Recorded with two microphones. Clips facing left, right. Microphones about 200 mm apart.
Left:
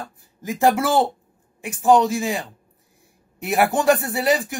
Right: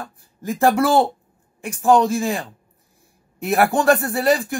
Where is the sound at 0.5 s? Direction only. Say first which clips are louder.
Right 1 dB; 20° left (ahead or behind).